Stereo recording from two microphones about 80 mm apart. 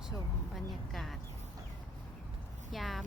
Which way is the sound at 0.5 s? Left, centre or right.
Centre.